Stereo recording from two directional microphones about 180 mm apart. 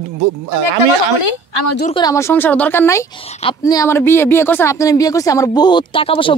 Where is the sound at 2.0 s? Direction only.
20° left (ahead or behind).